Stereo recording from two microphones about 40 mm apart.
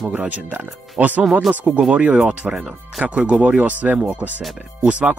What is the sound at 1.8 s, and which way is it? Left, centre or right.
Speech, right.